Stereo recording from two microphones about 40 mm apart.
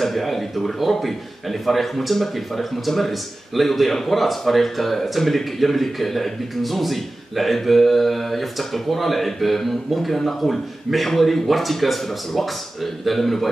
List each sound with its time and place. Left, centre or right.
0.0 s a man's voice: centre